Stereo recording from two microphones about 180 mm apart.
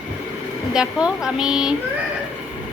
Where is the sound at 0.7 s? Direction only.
5° right (ahead or behind).